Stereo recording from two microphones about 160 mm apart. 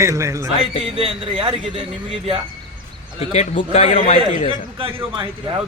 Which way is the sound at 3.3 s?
45° left (ahead or behind).